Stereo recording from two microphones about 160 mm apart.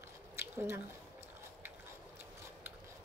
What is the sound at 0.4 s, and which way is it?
Squish, 15° right (ahead or behind).